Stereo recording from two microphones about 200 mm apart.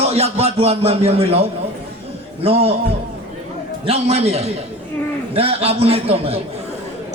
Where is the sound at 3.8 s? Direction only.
30° right (ahead or behind).